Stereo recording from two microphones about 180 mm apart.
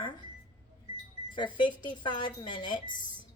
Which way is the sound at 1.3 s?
25° left (ahead or behind).